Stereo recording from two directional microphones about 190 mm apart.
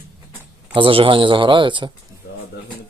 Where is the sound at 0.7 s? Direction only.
25° right (ahead or behind).